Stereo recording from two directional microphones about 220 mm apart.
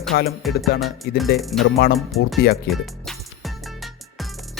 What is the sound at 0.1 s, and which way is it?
Music, 55° left (ahead or behind).